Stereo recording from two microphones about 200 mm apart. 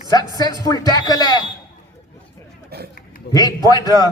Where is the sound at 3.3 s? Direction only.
20° left (ahead or behind).